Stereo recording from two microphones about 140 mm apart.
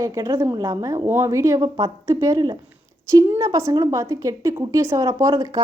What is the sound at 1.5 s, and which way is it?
Speech, 35° right (ahead or behind).